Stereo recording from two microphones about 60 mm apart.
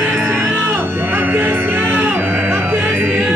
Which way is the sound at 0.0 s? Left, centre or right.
Right.